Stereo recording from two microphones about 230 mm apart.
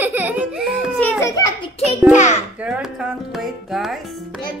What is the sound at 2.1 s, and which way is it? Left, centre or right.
Speech, left.